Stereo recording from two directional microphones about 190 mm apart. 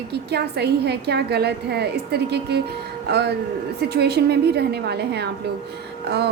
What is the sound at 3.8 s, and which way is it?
A woman's voice, 60° right (ahead or behind).